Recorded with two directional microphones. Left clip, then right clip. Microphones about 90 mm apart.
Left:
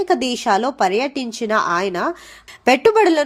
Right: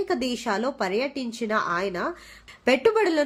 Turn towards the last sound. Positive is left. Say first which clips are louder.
# left 7 dB
turn(degrees=35)  # may be behind; listen again after turning